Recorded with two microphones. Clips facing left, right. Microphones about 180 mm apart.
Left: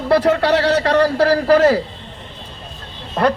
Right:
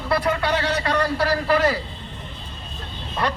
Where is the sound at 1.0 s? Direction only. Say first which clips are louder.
Left 7 dB; 40° left (ahead or behind).